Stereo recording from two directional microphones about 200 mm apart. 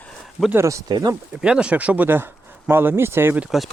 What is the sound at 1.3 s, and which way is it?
Speech, 5° right (ahead or behind).